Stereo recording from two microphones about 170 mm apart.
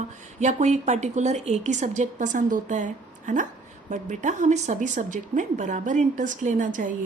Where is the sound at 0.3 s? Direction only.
45° right (ahead or behind).